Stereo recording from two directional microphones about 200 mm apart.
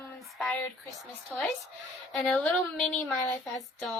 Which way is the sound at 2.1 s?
Centre (ahead or behind).